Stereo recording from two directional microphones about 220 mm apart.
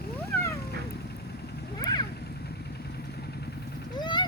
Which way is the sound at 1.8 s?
20° left (ahead or behind).